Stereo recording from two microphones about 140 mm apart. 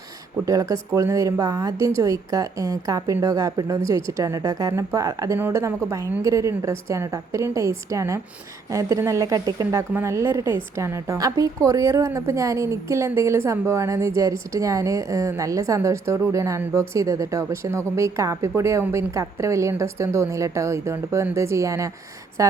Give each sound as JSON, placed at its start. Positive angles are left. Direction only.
{"t": 0.4, "sound": "a woman's voice", "side_deg": -25}